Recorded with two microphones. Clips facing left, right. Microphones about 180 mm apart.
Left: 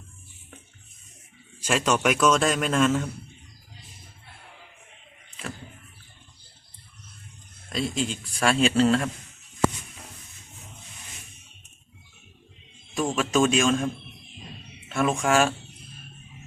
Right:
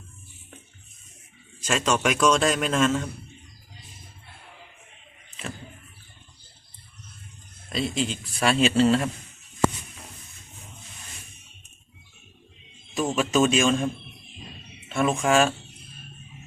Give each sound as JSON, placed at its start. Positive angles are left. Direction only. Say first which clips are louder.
{"t": 1.6, "sound": "a man's voice", "louder": "left 1 dB", "side_deg": 10}
{"t": 7.7, "sound": "a man's voice", "louder": "right 1 dB", "side_deg": 0}
{"t": 13.0, "sound": "a man's voice", "louder": "right 1 dB", "side_deg": 0}
{"t": 14.9, "sound": "a man's voice", "louder": "right 1 dB", "side_deg": 0}